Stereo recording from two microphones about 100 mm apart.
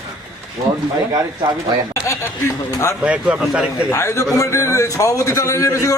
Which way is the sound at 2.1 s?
30° left (ahead or behind).